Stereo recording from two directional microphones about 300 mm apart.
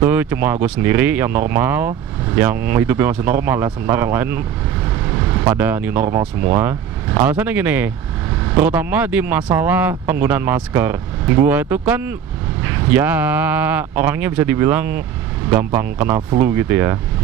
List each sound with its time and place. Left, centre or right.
0.0 s speech: centre